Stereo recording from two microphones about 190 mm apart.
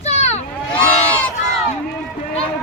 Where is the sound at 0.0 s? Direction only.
35° left (ahead or behind).